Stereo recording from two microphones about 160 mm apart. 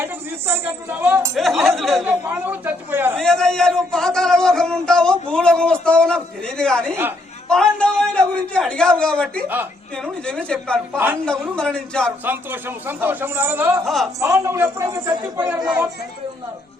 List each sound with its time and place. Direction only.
0.0 s speech: 15° right (ahead or behind)
1.4 s a man's voice: centre (ahead or behind)
2.0 s a man's voice: 10° right (ahead or behind)
3.2 s a man's voice: 5° left (ahead or behind)
10.9 s a man's voice: 10° right (ahead or behind)
11.3 s a man's voice: 5° left (ahead or behind)
12.2 s a man's voice: 10° right (ahead or behind)
13.8 s a man's voice: centre (ahead or behind)
14.2 s a man's voice: 20° right (ahead or behind)